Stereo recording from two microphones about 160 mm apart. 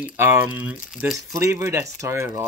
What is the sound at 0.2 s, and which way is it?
Speech, 10° right (ahead or behind).